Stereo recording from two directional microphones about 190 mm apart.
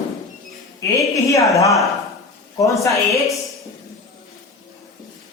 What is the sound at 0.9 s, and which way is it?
Speech, 15° left (ahead or behind).